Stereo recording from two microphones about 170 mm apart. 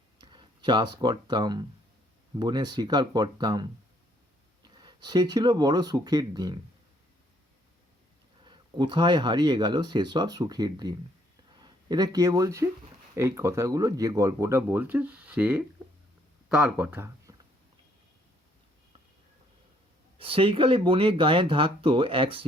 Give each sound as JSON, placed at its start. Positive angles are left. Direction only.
{"t": 0.2, "sound": "speech", "side_deg": -30}
{"t": 8.4, "sound": "speech", "side_deg": -25}
{"t": 20.1, "sound": "speech", "side_deg": -30}